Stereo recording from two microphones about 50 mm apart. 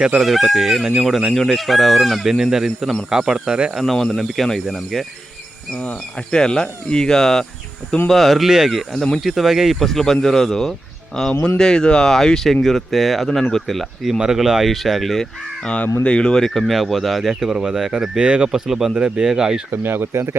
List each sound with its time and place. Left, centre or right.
0.2 s speech: centre
3.9 s speech: centre
5.8 s speech: left
6.3 s speech: centre
9.8 s speech: centre
14.2 s speech: centre
16.0 s speech: centre
18.5 s speech: centre
18.9 s speech: centre
19.7 s speech: right